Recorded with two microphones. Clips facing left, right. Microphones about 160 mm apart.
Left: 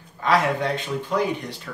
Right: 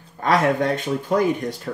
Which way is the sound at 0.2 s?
45° right (ahead or behind).